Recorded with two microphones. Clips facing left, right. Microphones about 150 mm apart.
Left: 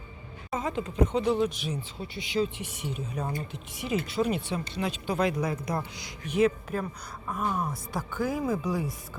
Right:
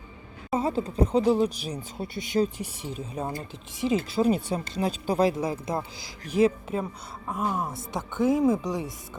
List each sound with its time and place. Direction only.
0.5 s speech: 35° right (ahead or behind)